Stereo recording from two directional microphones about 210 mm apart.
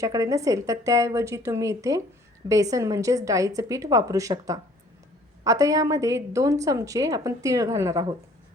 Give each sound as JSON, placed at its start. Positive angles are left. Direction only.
{"t": 0.0, "sound": "a woman's voice", "side_deg": -15}